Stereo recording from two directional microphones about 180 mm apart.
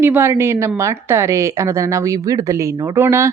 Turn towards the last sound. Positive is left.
turn(degrees=-15)  # may be behind; listen again after turning